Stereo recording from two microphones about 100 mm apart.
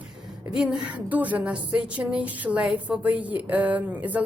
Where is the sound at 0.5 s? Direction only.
10° right (ahead or behind).